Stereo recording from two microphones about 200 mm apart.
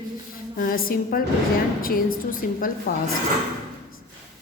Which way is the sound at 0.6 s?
45° left (ahead or behind).